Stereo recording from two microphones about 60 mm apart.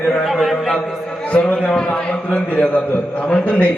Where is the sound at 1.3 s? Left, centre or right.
Centre.